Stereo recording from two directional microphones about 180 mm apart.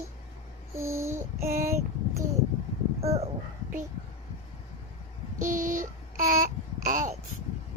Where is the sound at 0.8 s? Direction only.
15° right (ahead or behind).